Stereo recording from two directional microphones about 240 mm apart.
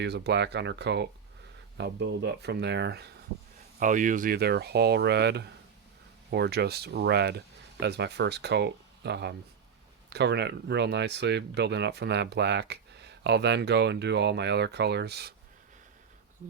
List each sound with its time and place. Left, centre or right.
0.0 s speech: right
3.8 s speech: right